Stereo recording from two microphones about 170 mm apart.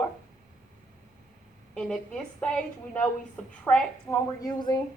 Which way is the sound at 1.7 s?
5° left (ahead or behind).